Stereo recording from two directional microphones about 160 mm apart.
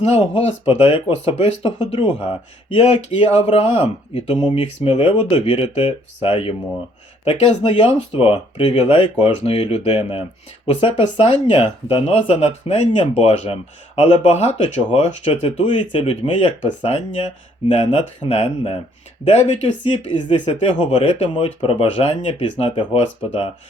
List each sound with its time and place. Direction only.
0.0 s speech: 45° left (ahead or behind)
2.8 s speech: 45° left (ahead or behind)
4.4 s speech: 30° left (ahead or behind)